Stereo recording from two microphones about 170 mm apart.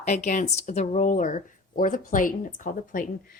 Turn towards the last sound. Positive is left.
turn(degrees=50)  # may be behind; listen again after turning